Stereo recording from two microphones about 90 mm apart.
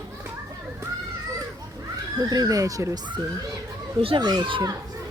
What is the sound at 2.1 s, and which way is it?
Speech, 45° right (ahead or behind).